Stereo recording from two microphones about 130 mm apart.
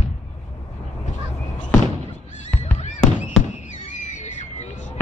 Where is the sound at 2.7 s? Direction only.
60° left (ahead or behind).